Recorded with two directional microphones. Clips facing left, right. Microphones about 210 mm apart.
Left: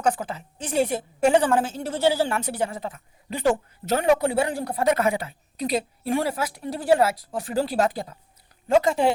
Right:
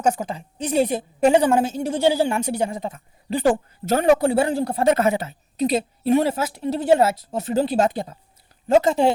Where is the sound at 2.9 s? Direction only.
35° right (ahead or behind).